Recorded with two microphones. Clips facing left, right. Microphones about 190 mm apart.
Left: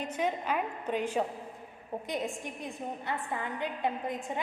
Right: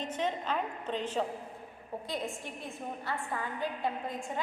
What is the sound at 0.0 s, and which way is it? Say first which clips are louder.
A woman's voice: left 2 dB; 10° left (ahead or behind).